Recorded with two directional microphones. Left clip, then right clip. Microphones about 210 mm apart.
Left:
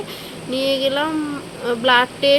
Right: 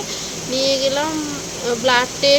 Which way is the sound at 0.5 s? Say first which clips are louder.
Right 1 dB; 10° left (ahead or behind).